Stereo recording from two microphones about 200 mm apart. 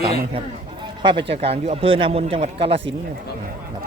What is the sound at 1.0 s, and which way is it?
Speech, 25° right (ahead or behind).